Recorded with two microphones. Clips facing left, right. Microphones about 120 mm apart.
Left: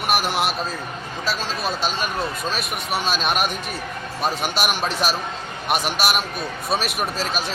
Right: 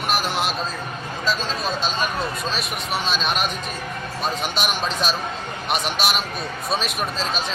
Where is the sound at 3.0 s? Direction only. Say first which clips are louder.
Left 1 dB; 55° left (ahead or behind).